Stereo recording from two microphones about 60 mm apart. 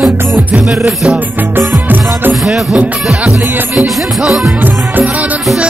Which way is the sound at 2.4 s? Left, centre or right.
Centre.